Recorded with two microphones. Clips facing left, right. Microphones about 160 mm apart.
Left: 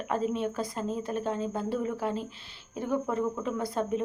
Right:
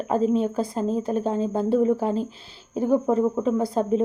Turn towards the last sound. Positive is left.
turn(degrees=-30)  # may be behind; listen again after turning